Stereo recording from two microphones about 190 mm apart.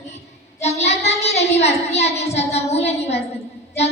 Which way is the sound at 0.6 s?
35° left (ahead or behind).